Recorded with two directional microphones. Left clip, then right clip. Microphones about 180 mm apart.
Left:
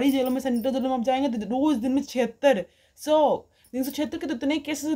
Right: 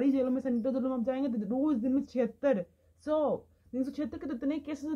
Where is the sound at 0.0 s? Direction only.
25° left (ahead or behind).